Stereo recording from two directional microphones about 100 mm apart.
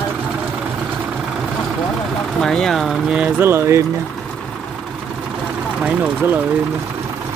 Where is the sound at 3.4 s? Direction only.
25° right (ahead or behind).